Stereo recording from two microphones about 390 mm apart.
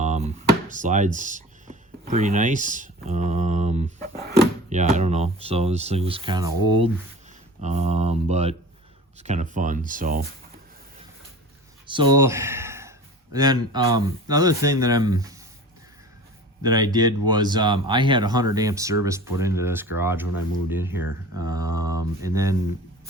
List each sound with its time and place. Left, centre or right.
0.0 s speech: centre
11.9 s speech: centre
16.6 s speech: centre